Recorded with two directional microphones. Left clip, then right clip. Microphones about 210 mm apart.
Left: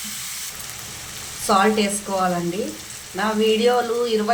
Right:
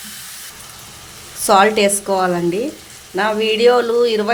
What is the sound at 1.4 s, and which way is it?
Speech, 45° right (ahead or behind).